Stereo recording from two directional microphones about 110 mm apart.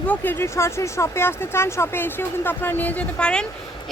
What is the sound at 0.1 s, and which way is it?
Speech, 20° left (ahead or behind).